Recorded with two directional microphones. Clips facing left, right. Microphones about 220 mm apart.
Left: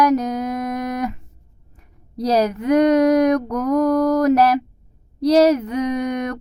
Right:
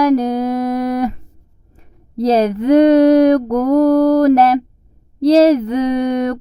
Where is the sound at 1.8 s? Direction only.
25° right (ahead or behind).